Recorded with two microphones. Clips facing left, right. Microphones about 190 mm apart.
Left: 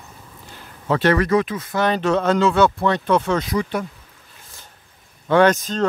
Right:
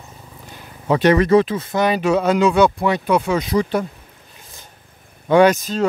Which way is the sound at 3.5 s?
35° right (ahead or behind).